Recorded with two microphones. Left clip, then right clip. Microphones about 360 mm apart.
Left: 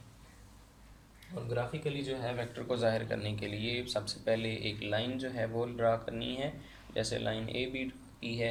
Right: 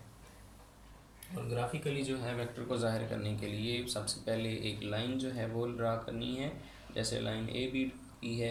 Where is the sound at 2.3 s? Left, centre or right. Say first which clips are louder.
Left 2 dB; left.